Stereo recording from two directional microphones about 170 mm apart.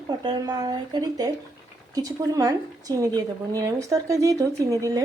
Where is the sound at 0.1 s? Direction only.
25° right (ahead or behind).